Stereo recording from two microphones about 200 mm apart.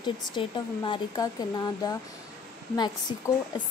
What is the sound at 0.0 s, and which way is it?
Speech, 25° left (ahead or behind).